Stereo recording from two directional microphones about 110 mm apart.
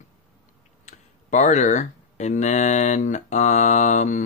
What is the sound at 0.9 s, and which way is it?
Speech, 90° left.